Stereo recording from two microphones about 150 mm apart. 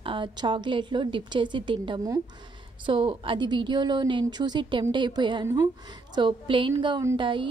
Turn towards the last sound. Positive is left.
turn(degrees=-35)  # may be behind; listen again after turning